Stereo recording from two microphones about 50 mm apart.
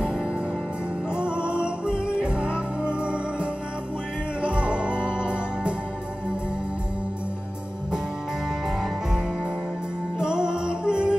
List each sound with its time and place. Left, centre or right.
1.1 s music: centre
10.2 s music: centre